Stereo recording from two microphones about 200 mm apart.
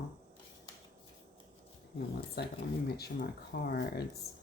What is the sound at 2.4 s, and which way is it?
Speech, 55° left (ahead or behind).